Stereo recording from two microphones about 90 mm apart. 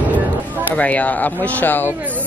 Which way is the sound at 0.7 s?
15° left (ahead or behind).